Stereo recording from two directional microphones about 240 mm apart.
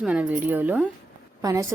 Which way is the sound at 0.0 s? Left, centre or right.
Centre.